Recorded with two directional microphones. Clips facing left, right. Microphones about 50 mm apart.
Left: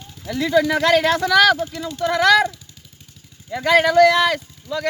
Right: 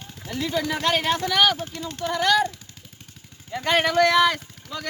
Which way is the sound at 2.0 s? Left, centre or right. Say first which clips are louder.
Left 6 dB; left.